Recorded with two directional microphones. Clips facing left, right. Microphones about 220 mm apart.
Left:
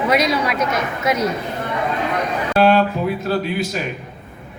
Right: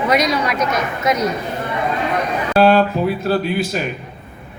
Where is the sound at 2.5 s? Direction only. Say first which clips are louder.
Right 2 dB; 35° right (ahead or behind).